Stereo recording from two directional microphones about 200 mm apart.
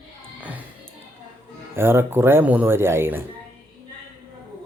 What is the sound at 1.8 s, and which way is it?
Speech, 10° right (ahead or behind).